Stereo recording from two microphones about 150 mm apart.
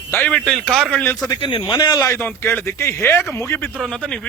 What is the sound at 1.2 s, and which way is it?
Speech, 30° left (ahead or behind).